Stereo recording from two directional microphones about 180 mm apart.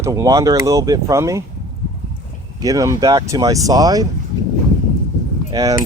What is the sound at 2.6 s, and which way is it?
Speech, 20° right (ahead or behind).